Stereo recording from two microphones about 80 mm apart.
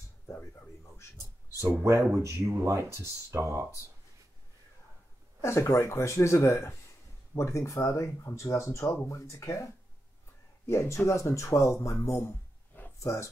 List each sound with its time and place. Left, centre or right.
0.3 s a sound: left
1.8 s speech: right
5.4 s speech: left
10.7 s speech: left